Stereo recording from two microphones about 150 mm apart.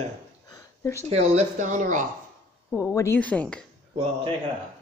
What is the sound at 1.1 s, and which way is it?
Speech, 55° right (ahead or behind).